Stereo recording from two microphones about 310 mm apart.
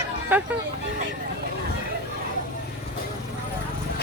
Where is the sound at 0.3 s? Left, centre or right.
Centre.